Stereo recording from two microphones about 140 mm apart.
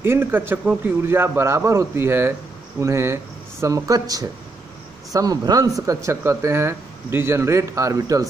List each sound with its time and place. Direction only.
0.0 s a man's voice: 15° right (ahead or behind)